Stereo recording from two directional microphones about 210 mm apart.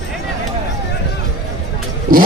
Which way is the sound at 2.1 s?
45° right (ahead or behind).